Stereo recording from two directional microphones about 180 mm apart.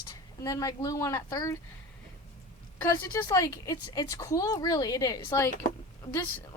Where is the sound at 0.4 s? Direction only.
20° left (ahead or behind).